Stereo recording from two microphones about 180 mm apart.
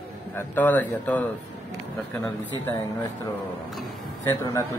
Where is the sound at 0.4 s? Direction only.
10° left (ahead or behind).